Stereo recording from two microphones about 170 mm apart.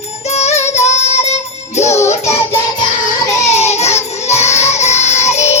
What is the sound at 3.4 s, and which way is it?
Child singing, 40° left (ahead or behind).